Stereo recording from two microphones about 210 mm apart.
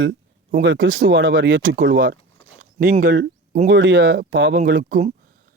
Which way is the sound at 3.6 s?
60° right (ahead or behind).